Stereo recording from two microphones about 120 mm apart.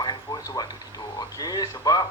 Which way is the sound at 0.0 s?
35° left (ahead or behind).